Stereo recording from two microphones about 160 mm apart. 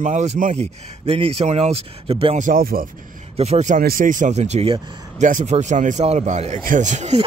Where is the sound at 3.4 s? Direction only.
45° right (ahead or behind).